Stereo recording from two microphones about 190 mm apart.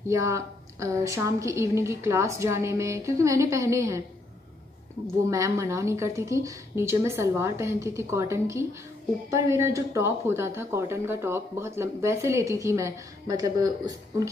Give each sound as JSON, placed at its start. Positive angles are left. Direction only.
{"t": 0.1, "sound": "speech", "side_deg": -15}
{"t": 5.2, "sound": "speech", "side_deg": -15}